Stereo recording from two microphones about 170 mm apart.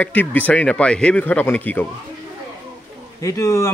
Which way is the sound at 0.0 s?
10° left (ahead or behind).